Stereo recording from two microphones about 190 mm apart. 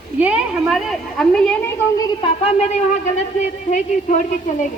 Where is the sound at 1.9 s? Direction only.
25° left (ahead or behind).